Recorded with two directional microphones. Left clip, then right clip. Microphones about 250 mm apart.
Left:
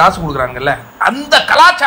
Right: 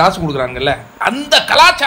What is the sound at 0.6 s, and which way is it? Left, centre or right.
A man's voice, centre.